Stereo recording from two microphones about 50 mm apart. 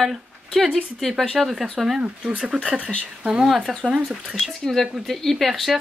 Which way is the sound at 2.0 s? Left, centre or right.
Right.